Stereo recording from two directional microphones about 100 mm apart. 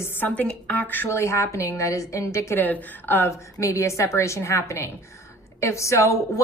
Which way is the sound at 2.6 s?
15° left (ahead or behind).